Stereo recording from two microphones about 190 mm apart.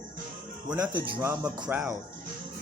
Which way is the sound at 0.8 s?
25° right (ahead or behind).